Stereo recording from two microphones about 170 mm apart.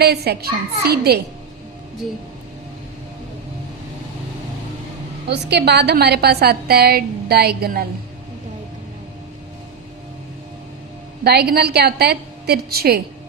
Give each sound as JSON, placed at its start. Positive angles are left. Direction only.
{"t": 0.0, "sound": "a woman's voice", "side_deg": -70}
{"t": 5.3, "sound": "a woman's voice", "side_deg": -80}
{"t": 11.2, "sound": "a woman's voice", "side_deg": -65}